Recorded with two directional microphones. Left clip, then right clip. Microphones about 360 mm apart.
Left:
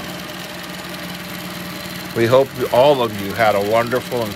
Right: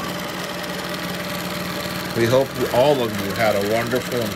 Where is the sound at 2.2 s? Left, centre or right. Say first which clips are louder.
Left 4 dB; centre.